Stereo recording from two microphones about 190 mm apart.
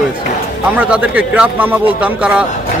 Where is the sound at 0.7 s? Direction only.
5° right (ahead or behind).